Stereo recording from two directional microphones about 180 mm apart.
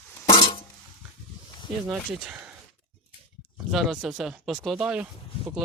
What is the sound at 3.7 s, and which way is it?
Speech, centre (ahead or behind).